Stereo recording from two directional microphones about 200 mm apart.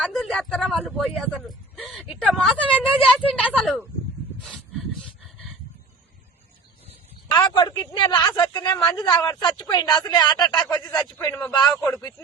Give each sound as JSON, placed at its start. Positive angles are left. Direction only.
{"t": 0.0, "sound": "speech", "side_deg": 0}
{"t": 4.4, "sound": "dog", "side_deg": 0}
{"t": 7.3, "sound": "a man's voice", "side_deg": 25}
{"t": 9.1, "sound": "a man's voice", "side_deg": 10}
{"t": 9.4, "sound": "a man's voice", "side_deg": 25}